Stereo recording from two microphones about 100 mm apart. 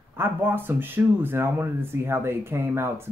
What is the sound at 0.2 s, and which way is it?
Speech, 20° right (ahead or behind).